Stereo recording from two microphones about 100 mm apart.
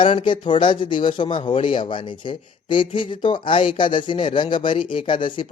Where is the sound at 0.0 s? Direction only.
55° left (ahead or behind).